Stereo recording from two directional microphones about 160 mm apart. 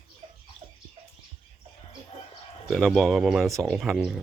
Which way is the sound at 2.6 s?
Centre (ahead or behind).